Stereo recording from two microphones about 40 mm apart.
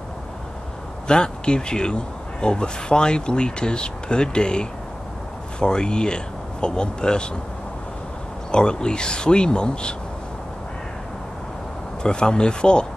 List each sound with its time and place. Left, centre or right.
1.0 s speech: left
8.5 s speech: left
12.0 s speech: left